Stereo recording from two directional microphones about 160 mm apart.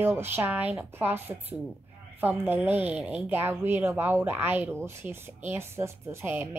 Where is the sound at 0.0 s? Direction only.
15° right (ahead or behind).